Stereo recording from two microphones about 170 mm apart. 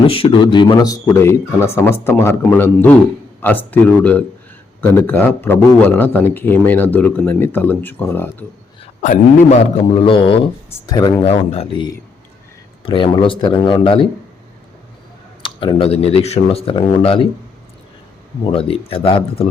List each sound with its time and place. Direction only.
0.1 s speech: 30° left (ahead or behind); by 8.4 s 10° left (ahead or behind)
9.0 s a man's voice: 45° left (ahead or behind)
15.4 s a man's voice: 30° left (ahead or behind)
18.4 s a man's voice: 35° left (ahead or behind)